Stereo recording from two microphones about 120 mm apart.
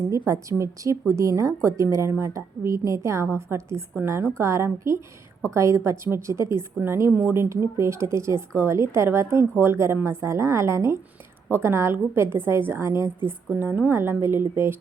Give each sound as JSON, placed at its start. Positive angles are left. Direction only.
{"t": 0.4, "sound": "a woman's voice", "side_deg": -25}